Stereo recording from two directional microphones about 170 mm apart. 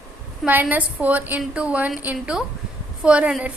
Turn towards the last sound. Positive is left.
turn(degrees=-5)  # may be behind; listen again after turning